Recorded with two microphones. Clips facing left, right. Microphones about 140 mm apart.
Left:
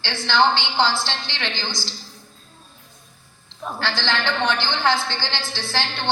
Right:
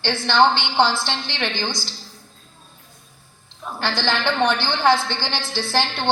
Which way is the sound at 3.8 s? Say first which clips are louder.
Right 3 dB; 15° right (ahead or behind).